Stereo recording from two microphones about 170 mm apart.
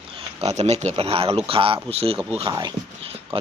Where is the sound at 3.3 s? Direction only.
30° right (ahead or behind).